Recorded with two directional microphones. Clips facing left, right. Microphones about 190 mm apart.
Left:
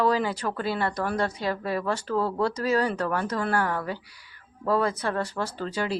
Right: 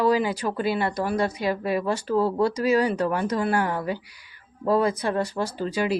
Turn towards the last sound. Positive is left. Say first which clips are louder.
# right 4 dB
turn(degrees=-10)  # may be behind; listen again after turning